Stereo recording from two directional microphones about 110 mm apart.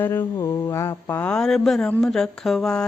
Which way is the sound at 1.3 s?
5° left (ahead or behind).